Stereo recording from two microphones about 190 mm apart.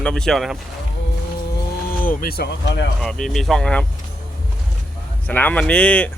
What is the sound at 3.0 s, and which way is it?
Speech, centre (ahead or behind).